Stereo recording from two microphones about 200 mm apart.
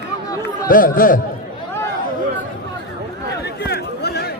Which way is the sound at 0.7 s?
45° left (ahead or behind).